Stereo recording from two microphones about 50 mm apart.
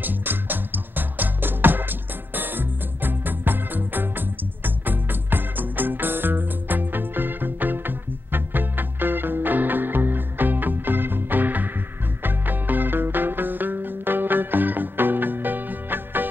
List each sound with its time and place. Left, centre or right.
0.0 s music: right